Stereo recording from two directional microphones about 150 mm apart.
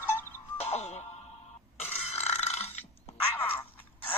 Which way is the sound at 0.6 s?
50° left (ahead or behind).